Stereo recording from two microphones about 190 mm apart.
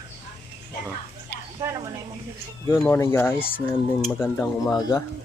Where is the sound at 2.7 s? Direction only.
10° left (ahead or behind).